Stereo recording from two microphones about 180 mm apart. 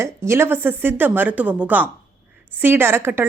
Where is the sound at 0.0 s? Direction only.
15° right (ahead or behind).